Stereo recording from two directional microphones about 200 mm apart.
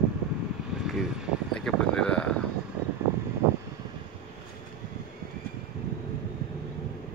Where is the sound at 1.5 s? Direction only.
5° left (ahead or behind).